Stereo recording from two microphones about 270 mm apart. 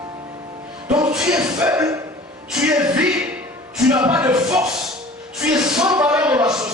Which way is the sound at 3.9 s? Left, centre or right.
Centre.